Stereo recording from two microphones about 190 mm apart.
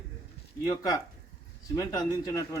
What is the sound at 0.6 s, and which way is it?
A man's voice, 20° left (ahead or behind).